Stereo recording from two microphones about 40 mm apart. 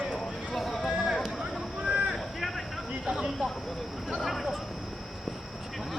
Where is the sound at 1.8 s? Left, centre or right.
Right.